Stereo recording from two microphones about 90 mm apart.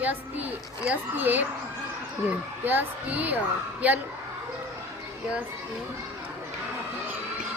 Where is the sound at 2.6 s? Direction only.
20° right (ahead or behind).